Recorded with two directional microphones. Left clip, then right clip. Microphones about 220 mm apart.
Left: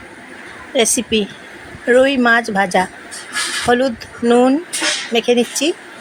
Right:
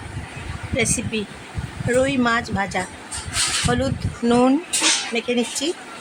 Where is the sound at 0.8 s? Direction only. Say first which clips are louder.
Left 8 dB; 15° left (ahead or behind).